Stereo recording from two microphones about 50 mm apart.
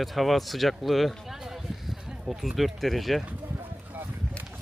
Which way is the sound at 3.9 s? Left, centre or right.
Right.